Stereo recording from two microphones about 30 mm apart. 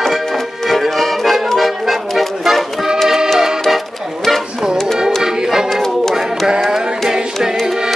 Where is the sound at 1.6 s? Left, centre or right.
Centre.